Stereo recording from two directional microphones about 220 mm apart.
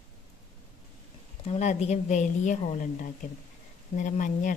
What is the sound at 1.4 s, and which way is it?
Speech, 30° left (ahead or behind).